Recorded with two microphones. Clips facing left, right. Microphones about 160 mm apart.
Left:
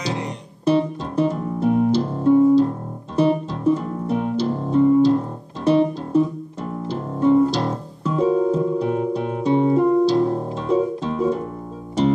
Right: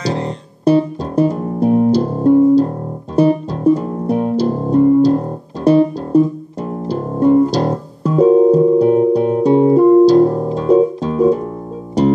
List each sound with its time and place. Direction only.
0.7 s music: 40° right (ahead or behind)
5.6 s guitar: 40° right (ahead or behind)
6.9 s music: 40° right (ahead or behind)